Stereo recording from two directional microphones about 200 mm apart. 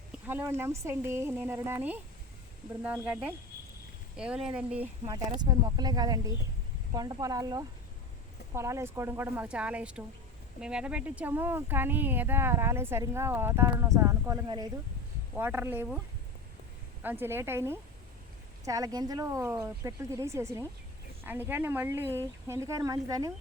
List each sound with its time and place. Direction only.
0.1 s speech: 10° right (ahead or behind)
5.0 s speech: 20° right (ahead or behind)
17.0 s speech: 10° right (ahead or behind)